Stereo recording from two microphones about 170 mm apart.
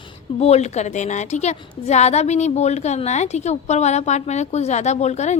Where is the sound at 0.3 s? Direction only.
40° left (ahead or behind).